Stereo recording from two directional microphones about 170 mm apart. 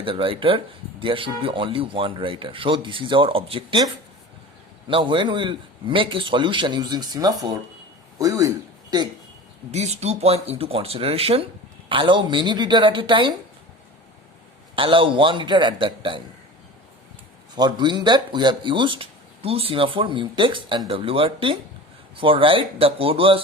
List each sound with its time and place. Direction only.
0.0 s speech: 30° right (ahead or behind)
4.9 s speech: 30° right (ahead or behind)
9.7 s speech: 40° right (ahead or behind)
14.8 s speech: 30° right (ahead or behind)
17.5 s speech: 25° right (ahead or behind)